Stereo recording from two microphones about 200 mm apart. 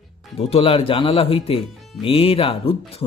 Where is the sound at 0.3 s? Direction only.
30° left (ahead or behind).